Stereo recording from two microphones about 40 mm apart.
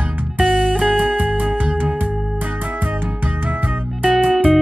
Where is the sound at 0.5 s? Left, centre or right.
Centre.